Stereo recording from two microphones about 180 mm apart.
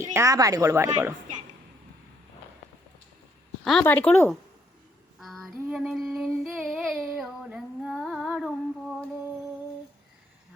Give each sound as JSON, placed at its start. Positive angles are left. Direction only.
{"t": 0.0, "sound": "a woman's voice", "side_deg": -15}
{"t": 3.6, "sound": "a woman's voice", "side_deg": 5}
{"t": 5.2, "sound": "female singing", "side_deg": 0}